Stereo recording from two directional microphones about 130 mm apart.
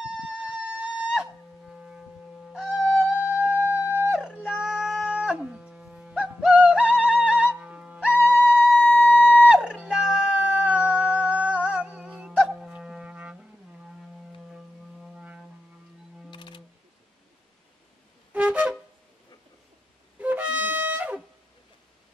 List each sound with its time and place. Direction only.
0.3 s music: 5° right (ahead or behind)
2.7 s music: 10° left (ahead or behind)
3.2 s a sound: 10° right (ahead or behind)
5.0 s yodeling: 10° right (ahead or behind)
8.8 s music: 10° left (ahead or behind)
9.5 s a sound: 5° right (ahead or behind)
15.1 s music: 10° right (ahead or behind)
16.3 s music: 40° left (ahead or behind)
18.3 s wind instrument: 10° right (ahead or behind)
20.2 s wind instrument: 10° right (ahead or behind)